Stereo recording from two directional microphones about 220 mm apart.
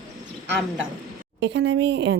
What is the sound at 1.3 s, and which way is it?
Speech, 55° right (ahead or behind).